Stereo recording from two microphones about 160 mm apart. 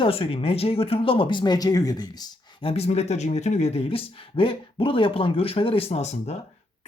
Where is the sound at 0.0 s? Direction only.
35° left (ahead or behind).